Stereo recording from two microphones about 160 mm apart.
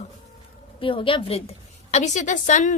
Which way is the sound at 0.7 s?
35° left (ahead or behind).